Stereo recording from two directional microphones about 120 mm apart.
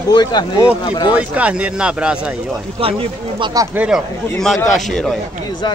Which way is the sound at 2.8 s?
50° right (ahead or behind).